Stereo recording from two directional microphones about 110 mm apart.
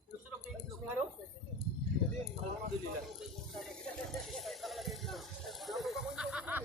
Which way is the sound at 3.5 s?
Centre (ahead or behind).